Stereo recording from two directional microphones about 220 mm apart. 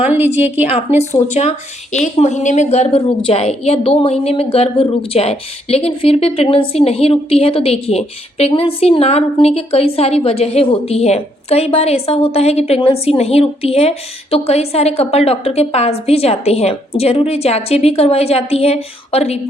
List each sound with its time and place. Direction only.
0.0 s a woman's voice: 10° right (ahead or behind)
0.9 s a woman's voice: 30° left (ahead or behind)